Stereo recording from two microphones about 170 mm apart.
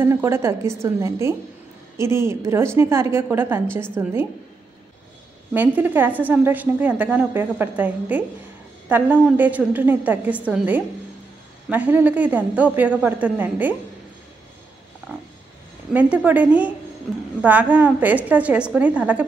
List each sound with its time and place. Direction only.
0.0 s a woman's voice: 15° right (ahead or behind)
5.5 s a woman's voice: 10° right (ahead or behind)
15.9 s a woman's voice: 10° right (ahead or behind)